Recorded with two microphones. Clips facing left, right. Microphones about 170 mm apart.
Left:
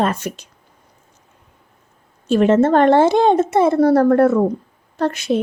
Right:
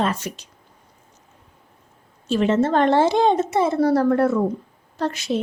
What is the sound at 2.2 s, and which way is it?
A woman's voice, 50° left (ahead or behind).